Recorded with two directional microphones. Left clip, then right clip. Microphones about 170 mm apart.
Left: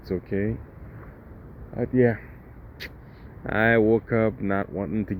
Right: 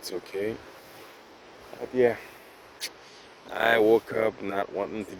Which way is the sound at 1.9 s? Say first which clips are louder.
Left 1 dB; 5° right (ahead or behind).